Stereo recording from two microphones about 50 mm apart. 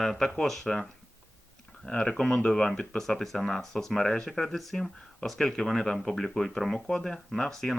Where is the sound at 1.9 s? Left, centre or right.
Centre.